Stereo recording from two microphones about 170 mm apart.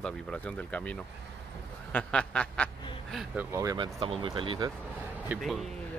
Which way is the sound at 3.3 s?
20° right (ahead or behind).